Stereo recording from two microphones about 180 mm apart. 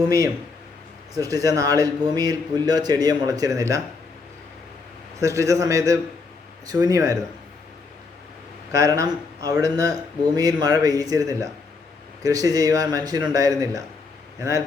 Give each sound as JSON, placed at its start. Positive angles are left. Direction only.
{"t": 1.1, "sound": "speech", "side_deg": -20}
{"t": 5.2, "sound": "a man's voice", "side_deg": -15}
{"t": 8.7, "sound": "speech", "side_deg": -20}